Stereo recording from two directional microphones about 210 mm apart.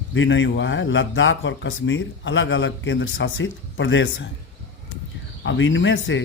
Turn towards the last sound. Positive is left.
turn(degrees=60)  # may be behind; listen again after turning